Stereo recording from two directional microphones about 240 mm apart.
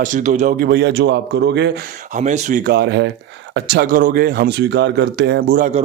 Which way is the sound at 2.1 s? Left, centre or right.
Right.